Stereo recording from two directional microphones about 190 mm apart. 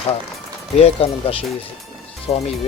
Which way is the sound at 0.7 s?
30° left (ahead or behind).